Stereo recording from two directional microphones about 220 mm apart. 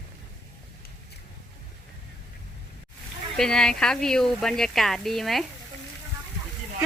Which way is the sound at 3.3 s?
5° left (ahead or behind).